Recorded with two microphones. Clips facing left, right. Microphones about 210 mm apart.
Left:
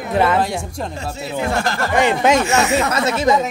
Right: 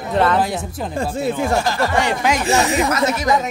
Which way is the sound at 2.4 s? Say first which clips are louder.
Right 1 dB; 35° right (ahead or behind).